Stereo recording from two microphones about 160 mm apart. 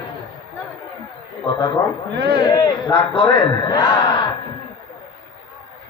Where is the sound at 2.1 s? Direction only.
90° right.